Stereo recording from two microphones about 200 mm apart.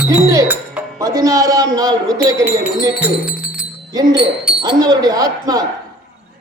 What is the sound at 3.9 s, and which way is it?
Speech, 20° right (ahead or behind).